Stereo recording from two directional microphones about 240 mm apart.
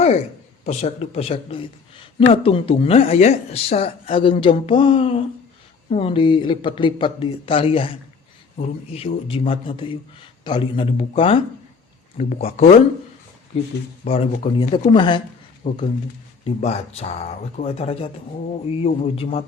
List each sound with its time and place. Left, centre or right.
0.6 s speech: left